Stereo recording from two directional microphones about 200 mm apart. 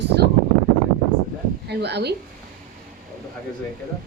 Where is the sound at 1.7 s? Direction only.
55° right (ahead or behind).